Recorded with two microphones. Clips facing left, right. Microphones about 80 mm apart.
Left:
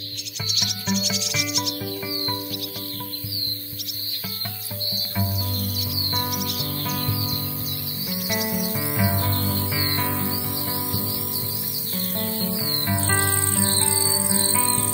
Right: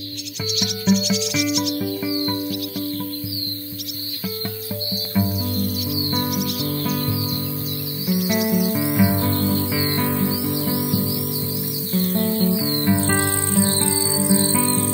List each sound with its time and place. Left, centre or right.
0.5 s cricket: centre
5.2 s music: centre
8.1 s music: centre
8.5 s music: centre
8.9 s music: centre
9.7 s music: centre
11.9 s music: centre